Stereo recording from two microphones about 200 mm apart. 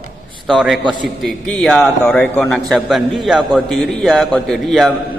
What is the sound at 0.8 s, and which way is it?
Speech, 25° right (ahead or behind).